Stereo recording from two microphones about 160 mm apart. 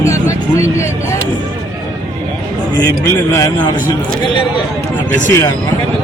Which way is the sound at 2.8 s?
20° left (ahead or behind).